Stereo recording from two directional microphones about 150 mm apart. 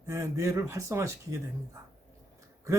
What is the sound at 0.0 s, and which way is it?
A man's voice, 20° right (ahead or behind).